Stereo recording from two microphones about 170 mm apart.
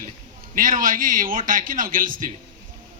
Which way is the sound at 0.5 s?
50° right (ahead or behind).